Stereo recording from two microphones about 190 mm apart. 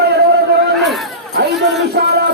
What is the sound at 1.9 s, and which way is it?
Music, 60° right (ahead or behind).